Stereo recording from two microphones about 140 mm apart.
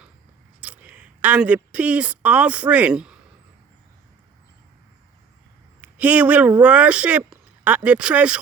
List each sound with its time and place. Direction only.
0.6 s speech: 10° right (ahead or behind)
5.8 s a man's voice: 10° right (ahead or behind)